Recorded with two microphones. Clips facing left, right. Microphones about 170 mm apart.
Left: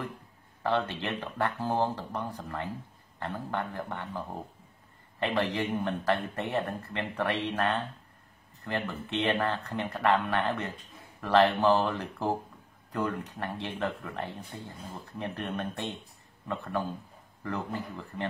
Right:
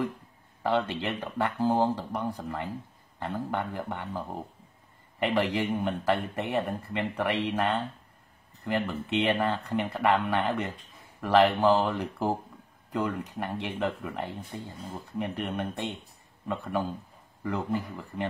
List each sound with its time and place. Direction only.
0.7 s speech: 15° right (ahead or behind)